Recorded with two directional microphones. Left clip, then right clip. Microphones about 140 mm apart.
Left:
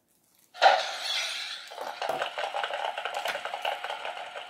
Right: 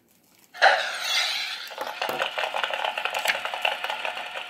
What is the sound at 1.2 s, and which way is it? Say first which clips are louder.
Stir: right 6 dB; 80° right.